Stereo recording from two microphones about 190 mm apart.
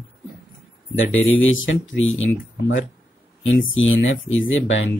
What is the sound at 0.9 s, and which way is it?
Speech, 90° left.